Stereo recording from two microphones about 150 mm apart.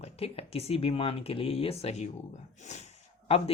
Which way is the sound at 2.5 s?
50° left (ahead or behind).